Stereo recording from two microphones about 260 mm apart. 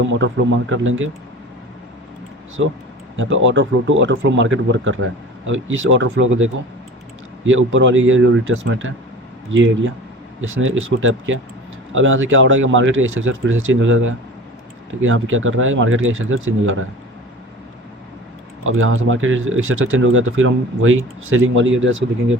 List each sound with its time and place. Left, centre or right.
0.0 s speech: right
2.6 s speech: right
18.6 s speech: right